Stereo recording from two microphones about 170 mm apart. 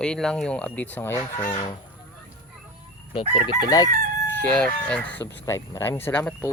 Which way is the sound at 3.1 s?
35° left (ahead or behind).